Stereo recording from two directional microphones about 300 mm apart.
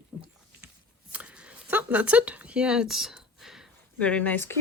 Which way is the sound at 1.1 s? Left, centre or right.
Centre.